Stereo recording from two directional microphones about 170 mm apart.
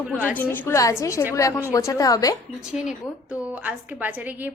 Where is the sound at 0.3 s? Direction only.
10° left (ahead or behind).